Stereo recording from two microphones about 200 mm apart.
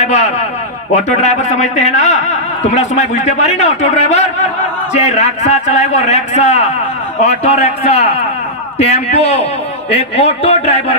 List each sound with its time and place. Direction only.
0.0 s a man's voice: 35° left (ahead or behind)